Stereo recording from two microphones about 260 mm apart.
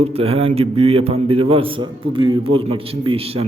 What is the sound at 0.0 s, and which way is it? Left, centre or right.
A man's voice, right.